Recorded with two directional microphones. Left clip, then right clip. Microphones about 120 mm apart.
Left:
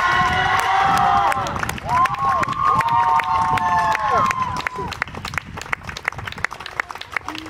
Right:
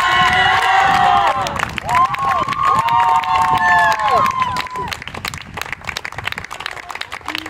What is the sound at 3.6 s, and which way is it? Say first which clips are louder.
Run: right 5 dB; 20° right (ahead or behind).